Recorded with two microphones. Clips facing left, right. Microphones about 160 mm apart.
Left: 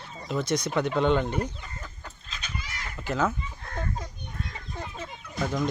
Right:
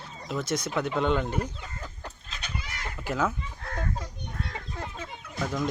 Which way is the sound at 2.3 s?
65° right (ahead or behind).